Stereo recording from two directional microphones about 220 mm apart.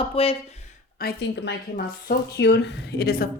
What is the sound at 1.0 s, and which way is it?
Speech, 50° left (ahead or behind).